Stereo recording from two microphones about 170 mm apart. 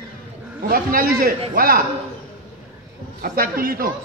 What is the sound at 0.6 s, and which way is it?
A man's voice, 55° right (ahead or behind).